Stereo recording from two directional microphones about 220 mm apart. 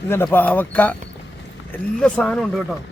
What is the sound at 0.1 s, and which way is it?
Speech, 10° left (ahead or behind).